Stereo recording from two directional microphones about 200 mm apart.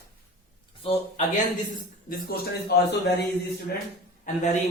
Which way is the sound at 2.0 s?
50° left (ahead or behind).